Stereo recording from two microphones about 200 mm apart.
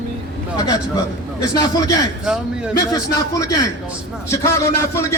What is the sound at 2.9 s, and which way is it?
A man's voice, 15° left (ahead or behind).